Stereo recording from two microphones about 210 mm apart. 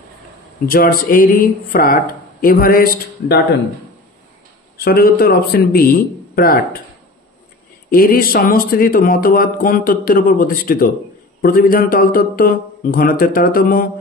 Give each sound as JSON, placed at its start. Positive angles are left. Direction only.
{"t": 0.7, "sound": "speech", "side_deg": 40}
{"t": 4.7, "sound": "speech", "side_deg": 45}
{"t": 7.9, "sound": "speech", "side_deg": 45}